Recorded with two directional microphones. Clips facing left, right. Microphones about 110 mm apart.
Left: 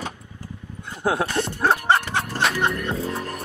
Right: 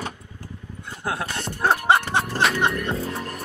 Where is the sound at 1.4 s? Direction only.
30° left (ahead or behind).